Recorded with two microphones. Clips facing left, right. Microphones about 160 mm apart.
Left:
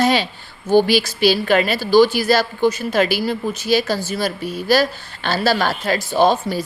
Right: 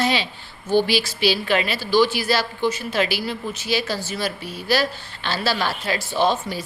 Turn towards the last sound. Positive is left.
turn(degrees=40)  # may be behind; listen again after turning